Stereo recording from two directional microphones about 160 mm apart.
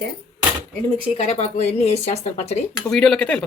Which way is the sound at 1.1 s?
40° left (ahead or behind).